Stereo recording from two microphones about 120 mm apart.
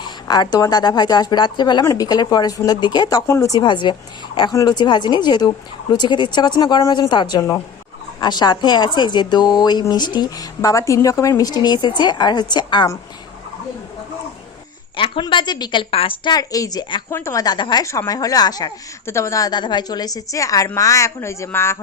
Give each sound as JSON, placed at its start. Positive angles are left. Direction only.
{"t": 0.0, "sound": "speech", "side_deg": 35}
{"t": 1.8, "sound": "speech", "side_deg": 25}
{"t": 2.0, "sound": "speech", "side_deg": 35}
{"t": 3.2, "sound": "speech", "side_deg": 25}
{"t": 14.9, "sound": "speech", "side_deg": 45}
{"t": 16.3, "sound": "speech", "side_deg": 30}
{"t": 17.1, "sound": "speech", "side_deg": 20}
{"t": 17.8, "sound": "speech", "side_deg": 25}
{"t": 19.0, "sound": "speech", "side_deg": 25}